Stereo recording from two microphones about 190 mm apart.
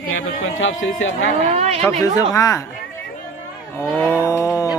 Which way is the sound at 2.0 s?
20° left (ahead or behind).